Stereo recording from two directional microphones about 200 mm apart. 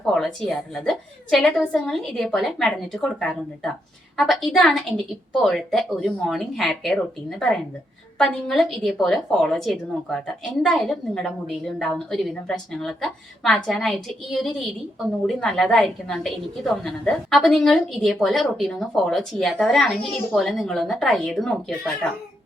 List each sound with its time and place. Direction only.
0.0 s a woman's voice: centre (ahead or behind)